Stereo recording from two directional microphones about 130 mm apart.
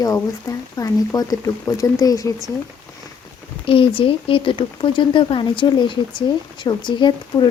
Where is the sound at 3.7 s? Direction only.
45° left (ahead or behind).